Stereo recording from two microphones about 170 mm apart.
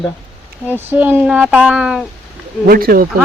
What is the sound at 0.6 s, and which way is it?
Speech, 10° right (ahead or behind).